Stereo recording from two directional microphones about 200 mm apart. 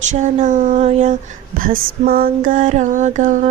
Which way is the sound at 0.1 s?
35° right (ahead or behind).